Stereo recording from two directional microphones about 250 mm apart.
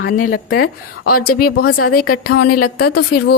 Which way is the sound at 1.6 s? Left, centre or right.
Left.